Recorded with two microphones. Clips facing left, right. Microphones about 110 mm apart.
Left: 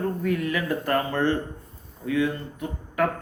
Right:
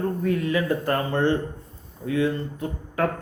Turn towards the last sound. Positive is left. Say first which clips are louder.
# even
turn(degrees=-30)  # may be behind; listen again after turning